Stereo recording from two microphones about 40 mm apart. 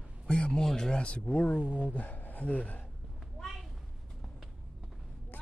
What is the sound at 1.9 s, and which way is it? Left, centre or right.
Speech, left.